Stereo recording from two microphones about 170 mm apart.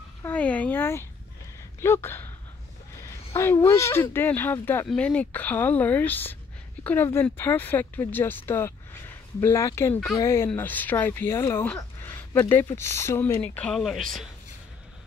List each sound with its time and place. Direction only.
0.2 s speech: 10° left (ahead or behind)
3.3 s speech: 15° left (ahead or behind); by 14.2 s centre (ahead or behind)